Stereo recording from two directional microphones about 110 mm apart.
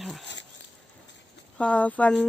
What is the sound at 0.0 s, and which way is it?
Dog, centre (ahead or behind).